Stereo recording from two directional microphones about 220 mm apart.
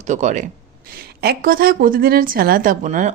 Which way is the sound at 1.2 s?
45° right (ahead or behind).